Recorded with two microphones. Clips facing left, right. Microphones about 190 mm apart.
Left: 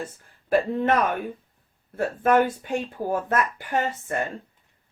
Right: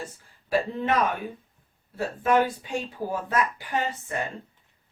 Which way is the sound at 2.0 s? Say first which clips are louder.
Left 3 dB; 50° left (ahead or behind).